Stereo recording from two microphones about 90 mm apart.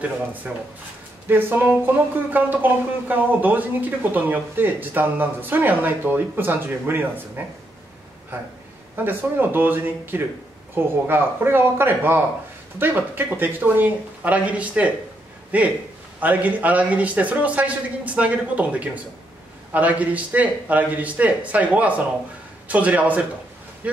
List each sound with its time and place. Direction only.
1.3 s speech: 20° right (ahead or behind)
8.9 s a man's voice: 20° right (ahead or behind)